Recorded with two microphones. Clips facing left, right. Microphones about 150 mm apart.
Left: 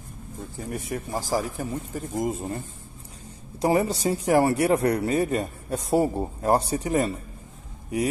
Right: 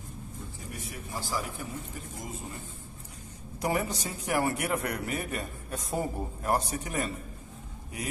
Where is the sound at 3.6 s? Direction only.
30° left (ahead or behind).